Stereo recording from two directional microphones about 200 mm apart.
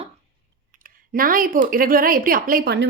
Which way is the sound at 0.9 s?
45° right (ahead or behind).